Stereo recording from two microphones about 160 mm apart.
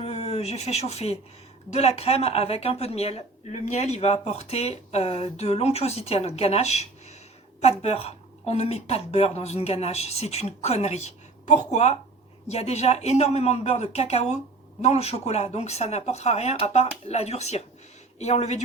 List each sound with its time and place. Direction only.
0.0 s speech: 40° left (ahead or behind)